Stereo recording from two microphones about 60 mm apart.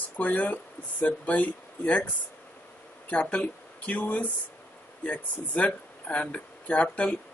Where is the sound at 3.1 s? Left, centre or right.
Left.